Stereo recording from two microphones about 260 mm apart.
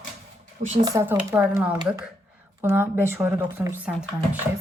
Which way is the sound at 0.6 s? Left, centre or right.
Right.